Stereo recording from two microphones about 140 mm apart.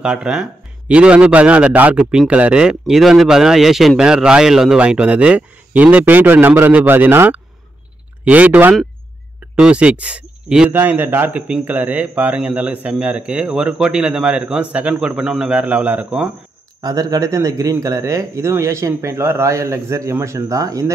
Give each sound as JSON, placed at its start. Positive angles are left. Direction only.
{"t": 0.0, "sound": "a man's voice", "side_deg": -5}
{"t": 16.8, "sound": "a man's voice", "side_deg": -25}